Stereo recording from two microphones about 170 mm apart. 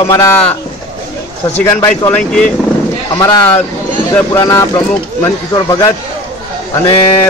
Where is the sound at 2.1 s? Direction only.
5° left (ahead or behind).